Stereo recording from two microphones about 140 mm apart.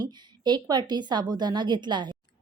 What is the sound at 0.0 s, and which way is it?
A woman's voice, 30° right (ahead or behind).